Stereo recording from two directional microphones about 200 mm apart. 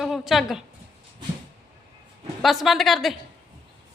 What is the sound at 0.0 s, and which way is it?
Speech, centre (ahead or behind).